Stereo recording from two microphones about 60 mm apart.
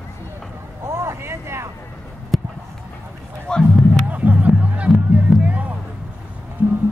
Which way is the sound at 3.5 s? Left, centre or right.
Centre.